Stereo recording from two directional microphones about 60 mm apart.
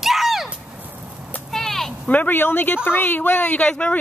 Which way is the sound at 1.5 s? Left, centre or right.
Centre.